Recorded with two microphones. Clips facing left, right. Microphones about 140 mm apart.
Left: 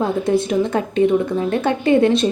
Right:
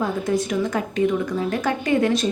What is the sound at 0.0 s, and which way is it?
A woman's voice, 25° left (ahead or behind).